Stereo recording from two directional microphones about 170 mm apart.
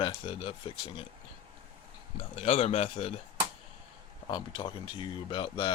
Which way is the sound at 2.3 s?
40° left (ahead or behind).